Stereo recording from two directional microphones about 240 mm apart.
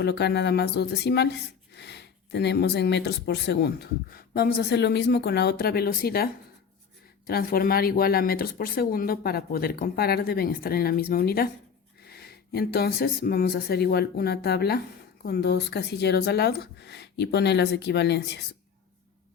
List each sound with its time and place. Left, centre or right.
0.0 s speech: left